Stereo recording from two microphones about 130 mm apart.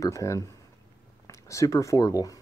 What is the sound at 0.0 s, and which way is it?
Speech, 25° left (ahead or behind).